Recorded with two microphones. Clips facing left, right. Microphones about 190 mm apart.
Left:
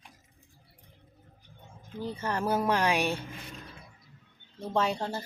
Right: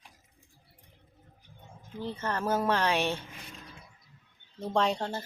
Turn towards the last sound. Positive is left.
turn(degrees=5)  # may be behind; listen again after turning